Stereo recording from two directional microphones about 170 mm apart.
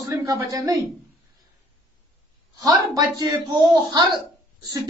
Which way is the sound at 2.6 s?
20° right (ahead or behind).